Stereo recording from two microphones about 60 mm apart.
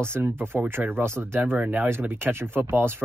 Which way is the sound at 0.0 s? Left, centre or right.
Right.